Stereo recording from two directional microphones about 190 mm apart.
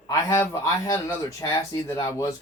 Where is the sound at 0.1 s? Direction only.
15° left (ahead or behind).